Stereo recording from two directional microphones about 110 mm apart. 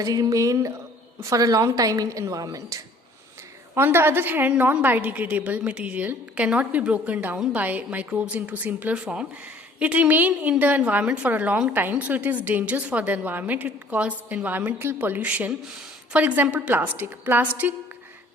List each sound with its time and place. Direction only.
0.0 s a woman's voice: 35° right (ahead or behind)
3.8 s a woman's voice: 20° right (ahead or behind)